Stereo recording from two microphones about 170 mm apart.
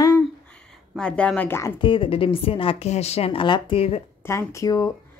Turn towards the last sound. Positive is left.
turn(degrees=20)  # may be behind; listen again after turning